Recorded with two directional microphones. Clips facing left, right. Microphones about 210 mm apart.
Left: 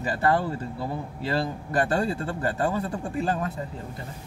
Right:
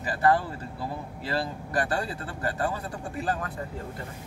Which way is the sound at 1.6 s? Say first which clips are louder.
Left 6 dB; 25° left (ahead or behind).